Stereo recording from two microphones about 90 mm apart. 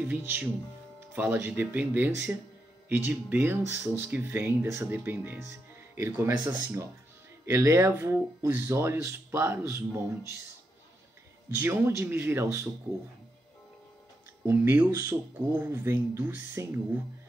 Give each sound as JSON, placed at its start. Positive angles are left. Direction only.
{"t": 0.0, "sound": "speech", "side_deg": -20}
{"t": 11.6, "sound": "speech", "side_deg": -25}
{"t": 14.4, "sound": "speech", "side_deg": -25}